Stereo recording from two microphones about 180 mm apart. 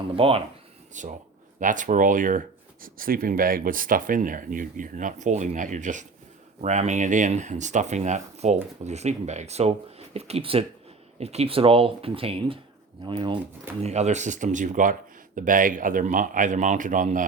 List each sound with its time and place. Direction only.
0.2 s speech: 30° right (ahead or behind)
0.9 s speech: 45° right (ahead or behind); by 13.4 s 25° right (ahead or behind)
13.8 s speech: 40° right (ahead or behind)